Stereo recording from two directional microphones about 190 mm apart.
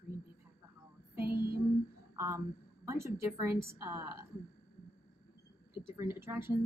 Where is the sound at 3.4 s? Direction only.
10° right (ahead or behind).